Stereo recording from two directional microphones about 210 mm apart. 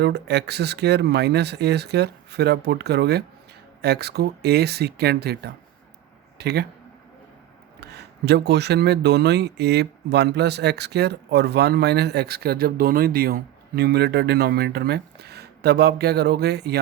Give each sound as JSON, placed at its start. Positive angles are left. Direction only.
{"t": 0.0, "sound": "speech", "side_deg": -50}
{"t": 7.8, "sound": "speech", "side_deg": -50}